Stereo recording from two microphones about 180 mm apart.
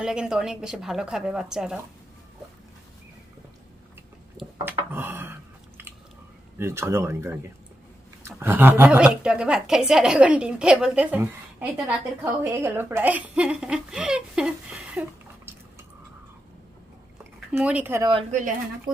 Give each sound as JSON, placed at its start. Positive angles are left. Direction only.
{"t": 0.0, "sound": "a woman's voice", "side_deg": -5}
{"t": 4.6, "sound": "speech", "side_deg": -10}
{"t": 6.6, "sound": "speech", "side_deg": -15}
{"t": 17.5, "sound": "speech", "side_deg": -10}
{"t": 18.3, "sound": "speech", "side_deg": -45}